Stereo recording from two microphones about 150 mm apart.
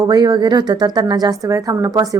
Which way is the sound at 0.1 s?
30° right (ahead or behind).